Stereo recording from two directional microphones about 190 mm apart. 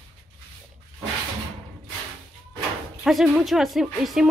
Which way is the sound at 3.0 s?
Centre (ahead or behind).